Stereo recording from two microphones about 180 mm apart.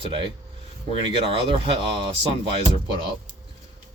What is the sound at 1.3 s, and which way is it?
Speech, 30° right (ahead or behind).